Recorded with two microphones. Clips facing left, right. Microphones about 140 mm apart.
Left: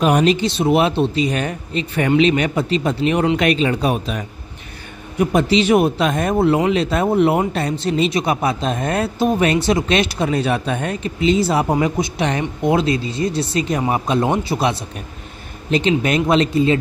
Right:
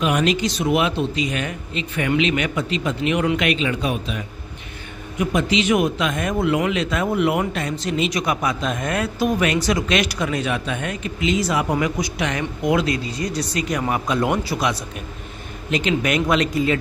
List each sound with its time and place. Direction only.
0.0 s a man's voice: 35° left (ahead or behind)
5.2 s a man's voice: 35° left (ahead or behind)